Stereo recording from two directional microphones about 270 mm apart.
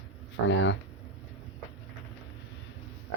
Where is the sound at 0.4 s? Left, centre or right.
Left.